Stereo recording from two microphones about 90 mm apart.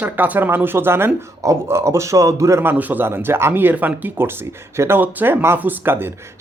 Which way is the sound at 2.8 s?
20° right (ahead or behind).